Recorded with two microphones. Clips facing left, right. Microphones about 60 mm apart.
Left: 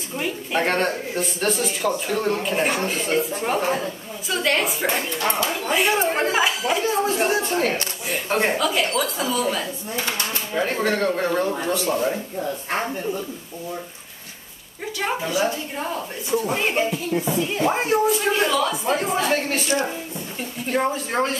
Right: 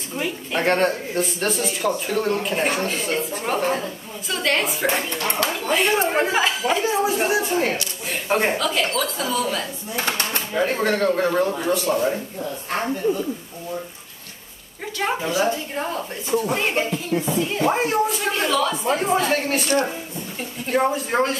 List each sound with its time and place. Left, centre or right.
0.2 s speech: centre
6.8 s speech: centre
8.5 s speech: centre
10.0 s speech: right
10.5 s speech: centre
15.0 s speech: centre
20.6 s speech: centre